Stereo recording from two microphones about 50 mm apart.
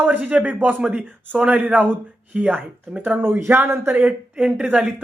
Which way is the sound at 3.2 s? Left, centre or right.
Right.